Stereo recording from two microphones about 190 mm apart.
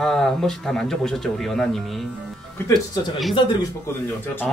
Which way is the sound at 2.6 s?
20° left (ahead or behind).